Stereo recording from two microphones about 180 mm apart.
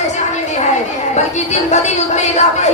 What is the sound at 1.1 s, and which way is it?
Speech, 40° left (ahead or behind).